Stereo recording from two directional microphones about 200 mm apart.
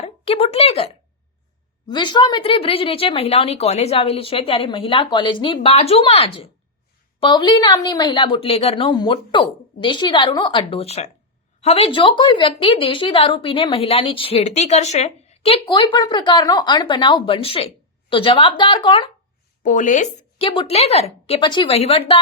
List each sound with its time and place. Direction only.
0.0 s speech: 30° left (ahead or behind)
1.9 s a woman's voice: 20° left (ahead or behind)
19.6 s speech: 40° left (ahead or behind)
20.5 s a woman's voice: 25° left (ahead or behind)